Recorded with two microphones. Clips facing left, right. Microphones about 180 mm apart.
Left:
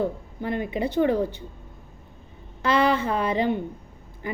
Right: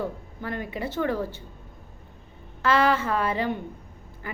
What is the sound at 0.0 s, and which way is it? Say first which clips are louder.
A woman's voice: left 5 dB; 20° left (ahead or behind).